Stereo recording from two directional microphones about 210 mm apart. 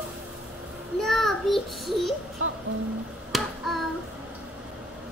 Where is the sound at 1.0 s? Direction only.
Centre (ahead or behind).